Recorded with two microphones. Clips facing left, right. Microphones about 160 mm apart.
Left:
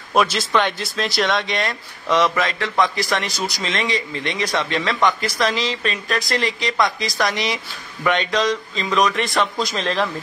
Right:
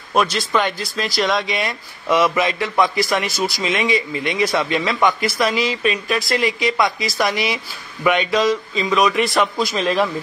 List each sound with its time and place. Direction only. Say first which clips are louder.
0.1 s speech: even; centre (ahead or behind)